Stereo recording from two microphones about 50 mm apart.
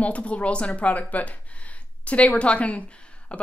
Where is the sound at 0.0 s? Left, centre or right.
Left.